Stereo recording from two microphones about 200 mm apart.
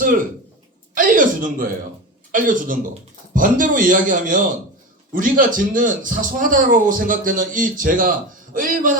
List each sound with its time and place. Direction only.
0.9 s a man's voice: 40° right (ahead or behind)